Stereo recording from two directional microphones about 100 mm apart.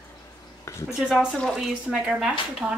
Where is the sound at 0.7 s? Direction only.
30° left (ahead or behind).